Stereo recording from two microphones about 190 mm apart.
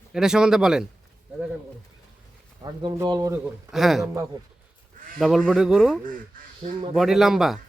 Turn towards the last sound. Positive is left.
turn(degrees=0)  # may be behind; listen again after turning